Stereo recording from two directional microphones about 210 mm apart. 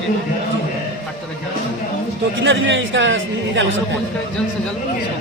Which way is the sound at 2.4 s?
60° right (ahead or behind).